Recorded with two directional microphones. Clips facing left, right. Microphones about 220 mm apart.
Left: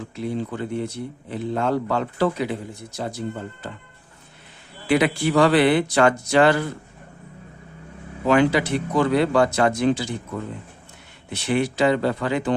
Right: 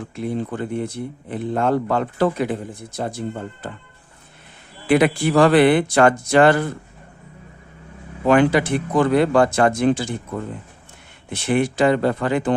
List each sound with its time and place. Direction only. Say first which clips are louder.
0.2 s speech: right 2 dB; 55° right (ahead or behind)
4.9 s speech: right 3 dB; 50° right (ahead or behind)
8.3 s speech: right 2 dB; 50° right (ahead or behind)
11.3 s speech: right 3 dB; 50° right (ahead or behind)